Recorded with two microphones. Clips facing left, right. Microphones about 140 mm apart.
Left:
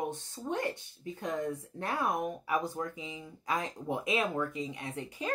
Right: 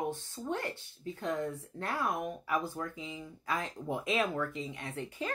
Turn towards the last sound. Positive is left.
turn(degrees=15)  # may be behind; listen again after turning